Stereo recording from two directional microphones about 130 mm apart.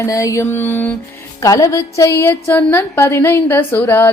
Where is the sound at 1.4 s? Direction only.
25° left (ahead or behind).